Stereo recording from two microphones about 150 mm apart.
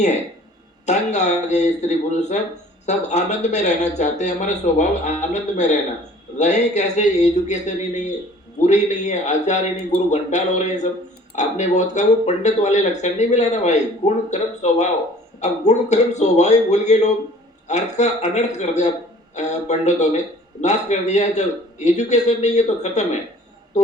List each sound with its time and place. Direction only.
0.9 s speech: 50° left (ahead or behind)